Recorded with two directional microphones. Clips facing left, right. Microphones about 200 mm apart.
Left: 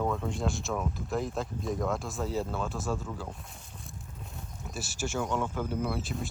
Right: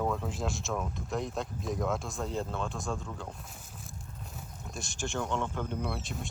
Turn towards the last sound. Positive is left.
turn(degrees=0)  # may be behind; listen again after turning